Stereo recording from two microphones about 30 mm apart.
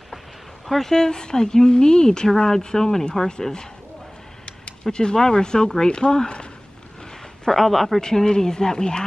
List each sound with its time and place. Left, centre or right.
0.7 s speech: centre
0.9 s speech: left
4.9 s speech: left
7.4 s speech: centre
8.0 s speech: left